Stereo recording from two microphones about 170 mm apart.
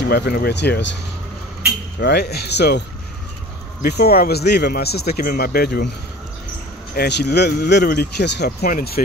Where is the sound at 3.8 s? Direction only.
65° left (ahead or behind).